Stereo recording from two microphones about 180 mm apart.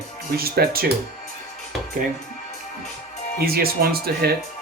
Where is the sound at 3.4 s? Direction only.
60° right (ahead or behind).